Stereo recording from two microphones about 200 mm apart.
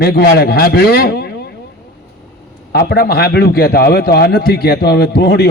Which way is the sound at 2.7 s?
55° left (ahead or behind).